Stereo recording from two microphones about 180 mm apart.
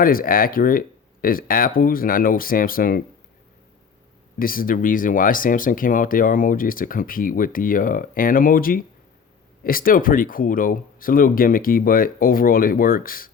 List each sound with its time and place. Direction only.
0.0 s speech: 55° left (ahead or behind)
4.4 s speech: 50° left (ahead or behind)